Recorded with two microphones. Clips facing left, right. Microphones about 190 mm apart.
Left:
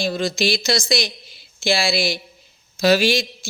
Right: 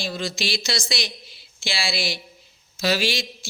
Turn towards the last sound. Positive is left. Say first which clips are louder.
# left 7 dB
turn(degrees=45)  # may be behind; listen again after turning